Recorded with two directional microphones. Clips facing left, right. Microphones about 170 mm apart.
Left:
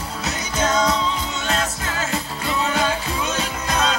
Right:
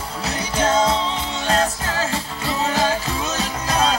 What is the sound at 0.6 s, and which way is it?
Music, 30° right (ahead or behind).